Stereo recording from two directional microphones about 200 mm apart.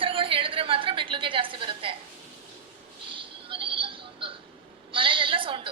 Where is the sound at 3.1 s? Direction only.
25° right (ahead or behind).